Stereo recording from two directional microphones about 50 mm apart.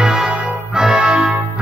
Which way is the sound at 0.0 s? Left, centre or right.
Centre.